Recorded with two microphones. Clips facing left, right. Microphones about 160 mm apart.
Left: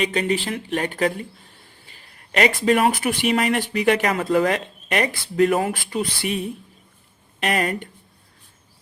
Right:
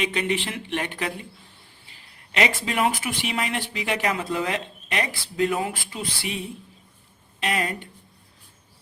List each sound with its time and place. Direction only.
0.0 s speech: 40° left (ahead or behind)
1.9 s a sound: 45° left (ahead or behind)
2.6 s speech: 45° left (ahead or behind)
5.4 s speech: 60° left (ahead or behind)